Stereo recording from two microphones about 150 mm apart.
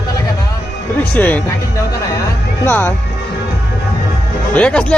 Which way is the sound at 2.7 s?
15° left (ahead or behind).